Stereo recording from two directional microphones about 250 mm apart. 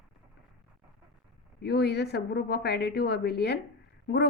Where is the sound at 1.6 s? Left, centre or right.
Left.